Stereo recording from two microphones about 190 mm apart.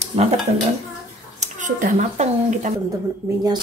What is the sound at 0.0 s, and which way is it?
Dishes, 35° right (ahead or behind).